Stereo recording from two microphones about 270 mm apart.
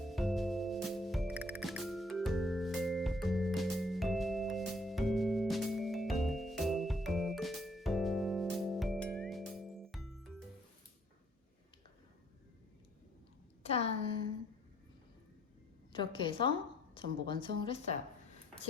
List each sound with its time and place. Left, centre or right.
0.0 s music: centre
13.6 s a sound: left
15.9 s a woman's voice: centre